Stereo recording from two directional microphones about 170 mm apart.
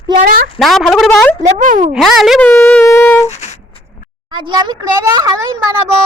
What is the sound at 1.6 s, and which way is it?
Speech, 45° right (ahead or behind).